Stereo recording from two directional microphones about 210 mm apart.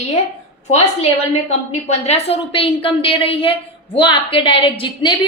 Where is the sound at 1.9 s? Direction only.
30° left (ahead or behind).